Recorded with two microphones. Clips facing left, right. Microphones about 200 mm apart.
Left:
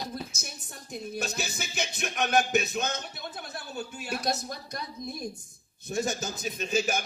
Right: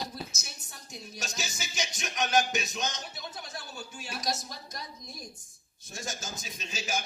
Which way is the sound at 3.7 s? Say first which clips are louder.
Left 10 dB; 60° left (ahead or behind).